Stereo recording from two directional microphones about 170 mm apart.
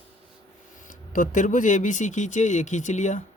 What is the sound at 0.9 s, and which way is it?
Speech, 50° left (ahead or behind).